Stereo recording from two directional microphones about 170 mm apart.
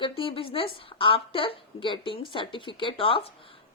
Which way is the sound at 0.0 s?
30° left (ahead or behind).